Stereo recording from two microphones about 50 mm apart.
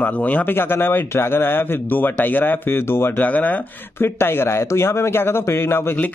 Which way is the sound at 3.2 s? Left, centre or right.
Left.